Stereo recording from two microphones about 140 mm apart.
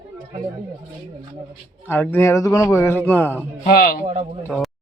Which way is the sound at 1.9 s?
15° left (ahead or behind).